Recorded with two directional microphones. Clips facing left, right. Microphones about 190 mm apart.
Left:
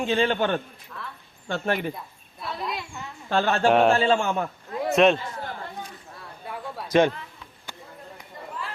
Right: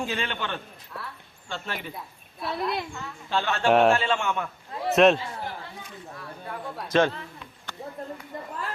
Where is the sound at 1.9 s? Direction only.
Centre (ahead or behind).